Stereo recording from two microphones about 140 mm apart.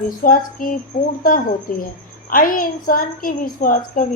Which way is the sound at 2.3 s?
85° left.